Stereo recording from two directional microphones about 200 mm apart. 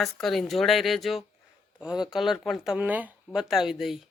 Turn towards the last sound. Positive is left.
turn(degrees=0)  # may be behind; listen again after turning